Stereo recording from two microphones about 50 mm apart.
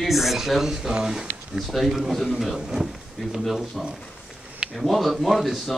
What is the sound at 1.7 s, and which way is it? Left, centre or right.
Speech, centre.